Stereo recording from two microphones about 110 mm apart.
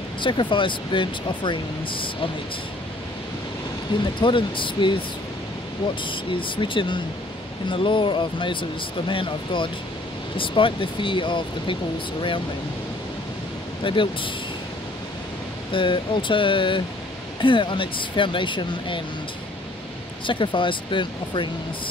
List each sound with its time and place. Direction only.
0.2 s speech: 45° left (ahead or behind)
4.0 s speech: 50° left (ahead or behind)
6.0 s speech: 50° left (ahead or behind)
13.8 s speech: 50° left (ahead or behind)
15.7 s speech: 50° left (ahead or behind)
20.2 s speech: 50° left (ahead or behind)